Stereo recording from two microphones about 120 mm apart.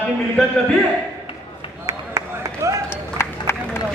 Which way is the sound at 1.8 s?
30° right (ahead or behind).